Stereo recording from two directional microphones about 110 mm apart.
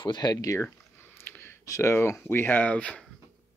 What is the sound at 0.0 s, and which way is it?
Speech, 40° left (ahead or behind).